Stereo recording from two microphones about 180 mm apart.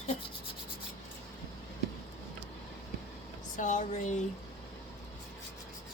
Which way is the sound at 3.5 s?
45° left (ahead or behind).